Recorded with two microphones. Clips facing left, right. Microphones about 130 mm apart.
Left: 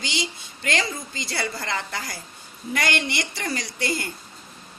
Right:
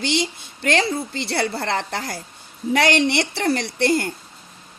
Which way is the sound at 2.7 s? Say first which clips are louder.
Right 8 dB; 75° right (ahead or behind).